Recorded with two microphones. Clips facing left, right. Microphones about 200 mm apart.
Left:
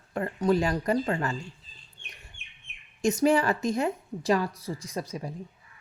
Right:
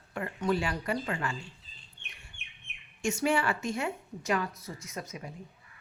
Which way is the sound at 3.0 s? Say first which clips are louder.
Left 6 dB; 35° left (ahead or behind).